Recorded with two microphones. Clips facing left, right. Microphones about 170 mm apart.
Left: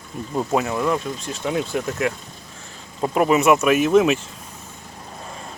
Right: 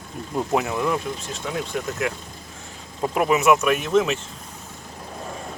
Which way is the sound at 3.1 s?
Centre (ahead or behind).